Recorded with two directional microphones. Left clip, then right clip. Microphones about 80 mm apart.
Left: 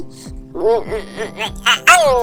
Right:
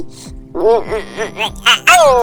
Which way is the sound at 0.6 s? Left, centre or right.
Right.